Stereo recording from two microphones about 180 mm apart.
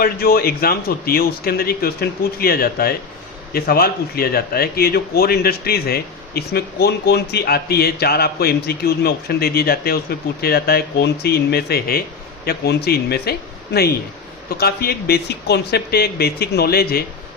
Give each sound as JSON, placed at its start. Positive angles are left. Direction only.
{"t": 0.0, "sound": "speech", "side_deg": 55}
{"t": 14.6, "sound": "speech", "side_deg": 60}